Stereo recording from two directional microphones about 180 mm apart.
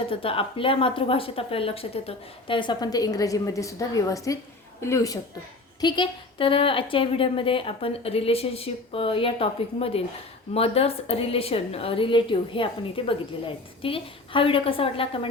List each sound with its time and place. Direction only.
0.1 s a woman's voice: 30° left (ahead or behind)